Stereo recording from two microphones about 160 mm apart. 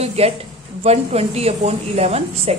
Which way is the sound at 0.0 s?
40° right (ahead or behind).